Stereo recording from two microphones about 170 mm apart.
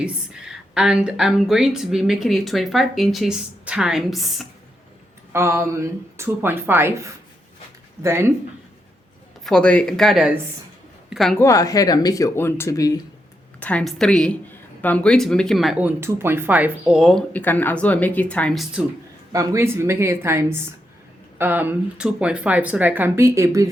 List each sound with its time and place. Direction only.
0.0 s a woman's voice: 5° right (ahead or behind)
5.3 s speech: 15° right (ahead or behind)
9.4 s a woman's voice: 5° left (ahead or behind)
11.3 s speech: 20° left (ahead or behind)
13.6 s a woman's voice: 10° left (ahead or behind)
19.3 s speech: 20° right (ahead or behind)